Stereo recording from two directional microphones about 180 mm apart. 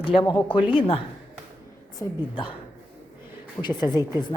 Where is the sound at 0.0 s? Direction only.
30° left (ahead or behind).